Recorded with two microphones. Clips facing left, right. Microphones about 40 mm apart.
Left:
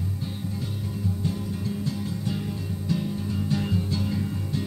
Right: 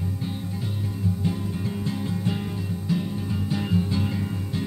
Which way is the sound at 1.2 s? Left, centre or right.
Right.